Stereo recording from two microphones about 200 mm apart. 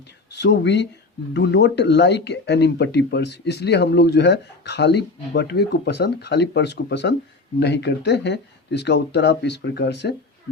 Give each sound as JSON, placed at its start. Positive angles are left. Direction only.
{"t": 0.3, "sound": "speech", "side_deg": 60}